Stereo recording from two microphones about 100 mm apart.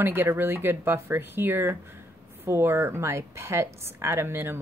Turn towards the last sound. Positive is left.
turn(degrees=-25)  # may be behind; listen again after turning